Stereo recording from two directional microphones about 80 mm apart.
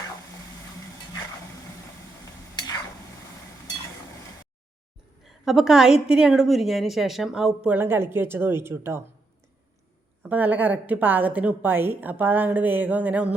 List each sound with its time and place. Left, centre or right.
2.6 s stir: left
5.2 s a woman's voice: centre
7.8 s a woman's voice: right
10.2 s a woman's voice: right